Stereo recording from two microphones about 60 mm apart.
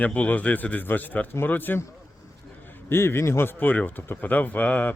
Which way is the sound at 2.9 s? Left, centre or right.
Left.